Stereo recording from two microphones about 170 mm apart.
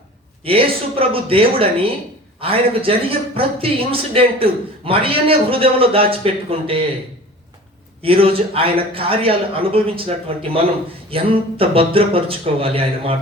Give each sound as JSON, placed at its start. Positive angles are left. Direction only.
{"t": 0.4, "sound": "a man's voice", "side_deg": -30}
{"t": 8.0, "sound": "a man's voice", "side_deg": -35}